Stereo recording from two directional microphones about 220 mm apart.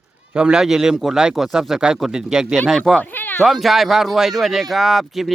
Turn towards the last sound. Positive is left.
turn(degrees=0)  # may be behind; listen again after turning